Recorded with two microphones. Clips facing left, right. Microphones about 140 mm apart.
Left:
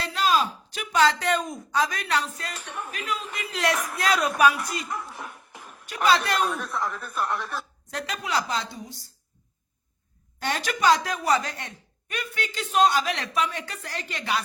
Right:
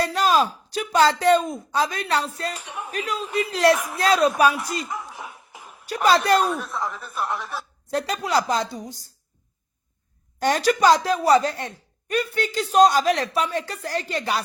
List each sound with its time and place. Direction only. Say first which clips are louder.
0.0 s speech: right 4 dB; 45° right (ahead or behind)
2.6 s speech: right 2 dB; 10° right (ahead or behind)
3.3 s a woman's voice: right 9 dB; 35° right (ahead or behind)
4.9 s a sound: right 1 dB; centre (ahead or behind)
5.8 s a woman's voice: right 3 dB; 40° right (ahead or behind)
6.4 s a man's voice: right 2 dB; 5° right (ahead or behind)
7.9 s a woman's voice: right 7 dB; 35° right (ahead or behind)
10.4 s a woman's voice: right 6 dB; 40° right (ahead or behind)